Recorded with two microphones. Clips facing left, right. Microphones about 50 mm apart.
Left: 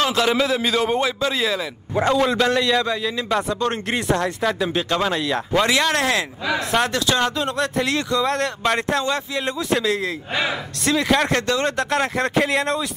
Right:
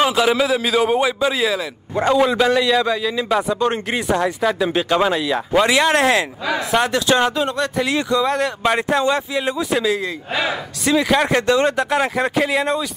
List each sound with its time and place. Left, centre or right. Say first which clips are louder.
0.0 s a man's voice: right 3 dB; centre
6.4 s a man's voice: right 2 dB; centre
6.9 s speech: right 4 dB; centre
7.4 s a man's voice: right 1 dB; centre
7.9 s a man's voice: right 3 dB; centre